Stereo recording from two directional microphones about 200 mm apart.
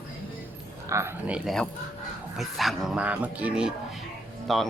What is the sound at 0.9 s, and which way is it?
Speech, 15° right (ahead or behind).